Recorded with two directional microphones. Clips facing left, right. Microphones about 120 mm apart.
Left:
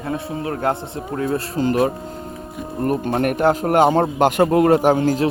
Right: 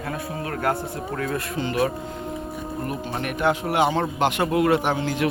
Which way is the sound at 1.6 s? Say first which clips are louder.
Left 6 dB; 40° left (ahead or behind).